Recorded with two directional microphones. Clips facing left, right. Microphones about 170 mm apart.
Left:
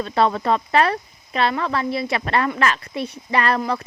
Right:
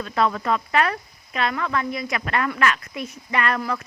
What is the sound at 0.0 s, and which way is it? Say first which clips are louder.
Speech: left 3 dB; 30° left (ahead or behind).